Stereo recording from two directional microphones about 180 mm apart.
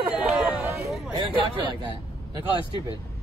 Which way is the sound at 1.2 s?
25° right (ahead or behind).